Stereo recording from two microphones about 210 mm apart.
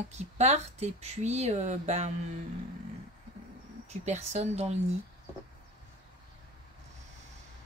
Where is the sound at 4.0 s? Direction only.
30° right (ahead or behind).